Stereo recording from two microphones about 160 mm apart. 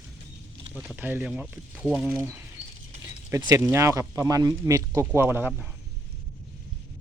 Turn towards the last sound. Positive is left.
turn(degrees=-10)  # may be behind; listen again after turning